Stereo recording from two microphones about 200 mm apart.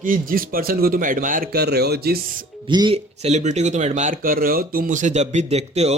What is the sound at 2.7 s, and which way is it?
Speech, 25° right (ahead or behind).